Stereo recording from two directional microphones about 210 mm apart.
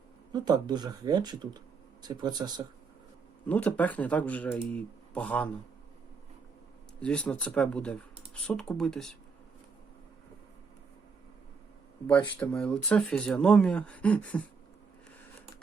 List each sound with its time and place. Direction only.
0.3 s speech: 20° right (ahead or behind)
3.4 s speech: 5° left (ahead or behind)
7.0 s speech: 5° left (ahead or behind)
12.0 s speech: 5° left (ahead or behind)